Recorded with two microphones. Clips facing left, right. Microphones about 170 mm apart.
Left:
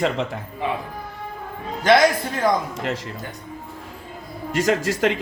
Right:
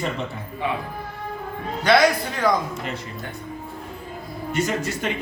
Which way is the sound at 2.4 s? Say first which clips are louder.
Left 1 dB; 20° left (ahead or behind).